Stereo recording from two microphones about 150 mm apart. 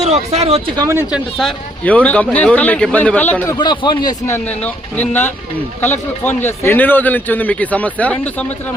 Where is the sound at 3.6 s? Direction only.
30° left (ahead or behind).